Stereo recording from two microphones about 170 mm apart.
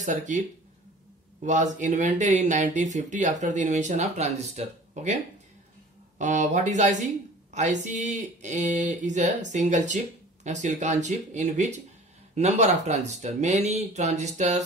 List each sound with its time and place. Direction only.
0.0 s speech: 45° right (ahead or behind)